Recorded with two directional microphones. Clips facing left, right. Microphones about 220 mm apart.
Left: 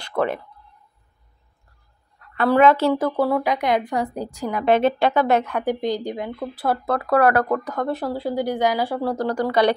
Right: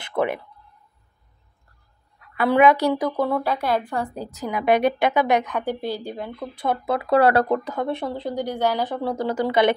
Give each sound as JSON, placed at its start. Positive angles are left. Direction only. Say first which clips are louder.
{"t": 0.1, "sound": "speech", "louder": "left 1 dB", "side_deg": -15}
{"t": 2.1, "sound": "a woman's voice", "louder": "left 1 dB", "side_deg": -10}
{"t": 2.9, "sound": "speech", "louder": "left 2 dB", "side_deg": 5}
{"t": 3.6, "sound": "speech", "louder": "left 2 dB", "side_deg": 20}
{"t": 4.5, "sound": "a woman's voice", "louder": "left 1 dB", "side_deg": -10}
{"t": 5.4, "sound": "speech", "louder": "left 3 dB", "side_deg": 10}
{"t": 7.0, "sound": "speech", "louder": "right 1 dB", "side_deg": -30}
{"t": 7.7, "sound": "speech", "louder": "left 1 dB", "side_deg": 0}
{"t": 9.2, "sound": "speech", "louder": "even", "side_deg": -20}